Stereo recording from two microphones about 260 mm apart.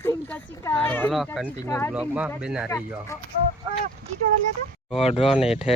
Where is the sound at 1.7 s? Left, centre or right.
Centre.